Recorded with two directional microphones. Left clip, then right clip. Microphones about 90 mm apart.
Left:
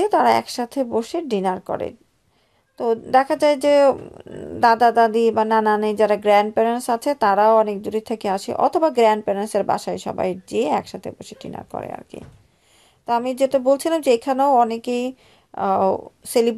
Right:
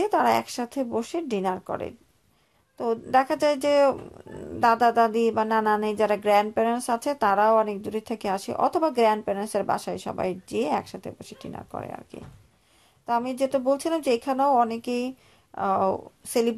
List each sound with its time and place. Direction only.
0.0 s speech: 35° left (ahead or behind)